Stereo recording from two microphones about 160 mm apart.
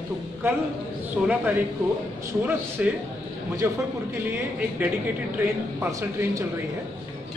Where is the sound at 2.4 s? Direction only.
15° right (ahead or behind).